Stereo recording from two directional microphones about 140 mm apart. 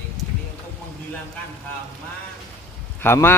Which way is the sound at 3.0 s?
15° left (ahead or behind).